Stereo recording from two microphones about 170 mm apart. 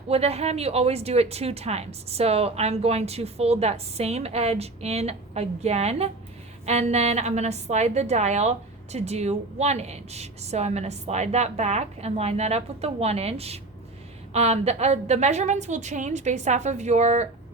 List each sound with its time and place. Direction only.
0.1 s a woman's voice: 40° right (ahead or behind)